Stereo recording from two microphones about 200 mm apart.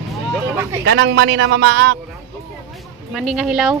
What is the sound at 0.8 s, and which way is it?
A man's voice, 60° right (ahead or behind).